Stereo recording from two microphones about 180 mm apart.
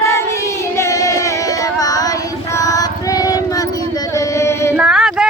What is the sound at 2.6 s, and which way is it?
Child singing, 20° left (ahead or behind).